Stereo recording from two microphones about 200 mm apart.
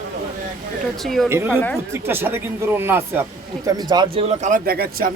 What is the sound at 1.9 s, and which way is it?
Speech, 10° right (ahead or behind).